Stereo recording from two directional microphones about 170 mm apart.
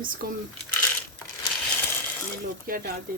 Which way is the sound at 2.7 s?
60° right (ahead or behind).